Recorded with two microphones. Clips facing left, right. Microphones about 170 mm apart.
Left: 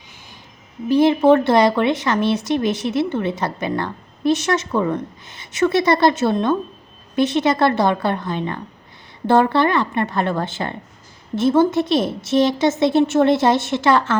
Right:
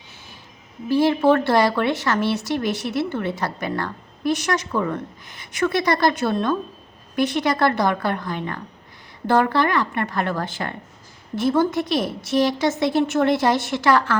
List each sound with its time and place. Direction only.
0.9 s speech: 20° left (ahead or behind)